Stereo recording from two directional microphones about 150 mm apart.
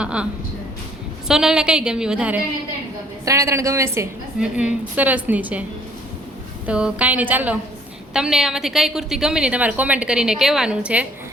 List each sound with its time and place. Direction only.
0.0 s a woman's voice: 5° right (ahead or behind)
1.3 s a woman's voice: 5° right (ahead or behind)
3.2 s a woman's voice: 20° right (ahead or behind)
4.4 s a woman's voice: 5° right (ahead or behind)
6.7 s a woman's voice: 10° right (ahead or behind)